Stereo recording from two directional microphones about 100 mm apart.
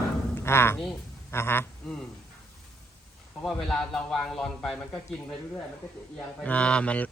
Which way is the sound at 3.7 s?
5° left (ahead or behind).